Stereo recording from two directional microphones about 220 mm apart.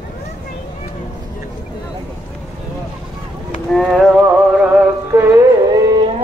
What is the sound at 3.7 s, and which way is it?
Music, centre (ahead or behind).